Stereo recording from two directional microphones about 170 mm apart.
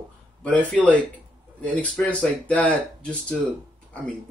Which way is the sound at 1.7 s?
10° left (ahead or behind).